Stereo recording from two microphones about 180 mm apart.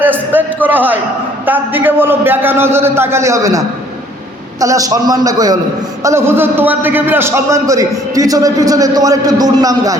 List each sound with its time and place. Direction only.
0.0 s a man's voice: 10° right (ahead or behind)
4.6 s a man's voice: 20° right (ahead or behind)